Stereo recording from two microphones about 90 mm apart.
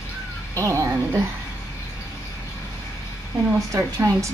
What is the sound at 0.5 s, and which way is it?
Speech, 35° right (ahead or behind).